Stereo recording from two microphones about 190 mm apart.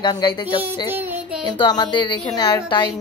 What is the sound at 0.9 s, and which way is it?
Child singing, 10° right (ahead or behind).